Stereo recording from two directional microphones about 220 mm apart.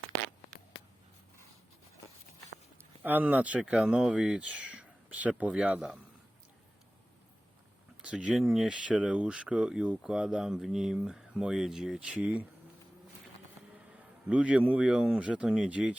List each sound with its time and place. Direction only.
3.0 s speech: 10° right (ahead or behind)
8.0 s speech: 5° right (ahead or behind)
14.3 s speech: 5° right (ahead or behind)